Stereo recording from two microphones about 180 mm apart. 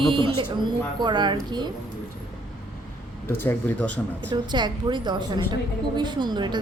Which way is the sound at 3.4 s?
10° left (ahead or behind).